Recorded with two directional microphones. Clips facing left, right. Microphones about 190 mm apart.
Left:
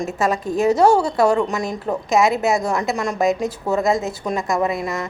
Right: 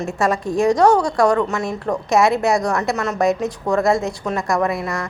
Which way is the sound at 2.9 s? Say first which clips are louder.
Right 1 dB; 15° left (ahead or behind).